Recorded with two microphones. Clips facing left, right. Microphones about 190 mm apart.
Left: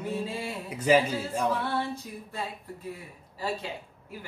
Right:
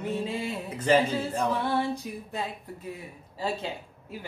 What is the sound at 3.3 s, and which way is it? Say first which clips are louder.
Speech: right 2 dB; 25° right (ahead or behind).